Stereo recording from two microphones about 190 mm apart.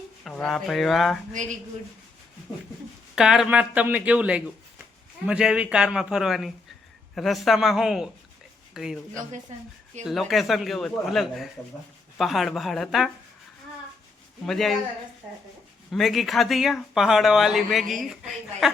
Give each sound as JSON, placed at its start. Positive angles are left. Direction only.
{"t": 0.3, "sound": "speech", "side_deg": 0}
{"t": 1.3, "sound": "speech", "side_deg": -40}
{"t": 3.2, "sound": "speech", "side_deg": -5}
{"t": 10.1, "sound": "speech", "side_deg": 0}
{"t": 14.4, "sound": "speech", "side_deg": 0}
{"t": 15.9, "sound": "speech", "side_deg": 0}